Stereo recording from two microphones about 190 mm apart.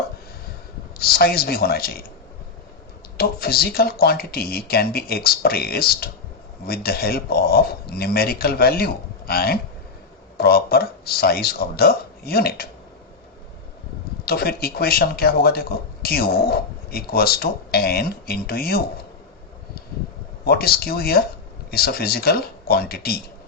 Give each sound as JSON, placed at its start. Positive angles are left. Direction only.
{"t": 0.9, "sound": "speech", "side_deg": 55}
{"t": 3.2, "sound": "speech", "side_deg": 55}
{"t": 14.3, "sound": "speech", "side_deg": 55}
{"t": 20.4, "sound": "speech", "side_deg": 55}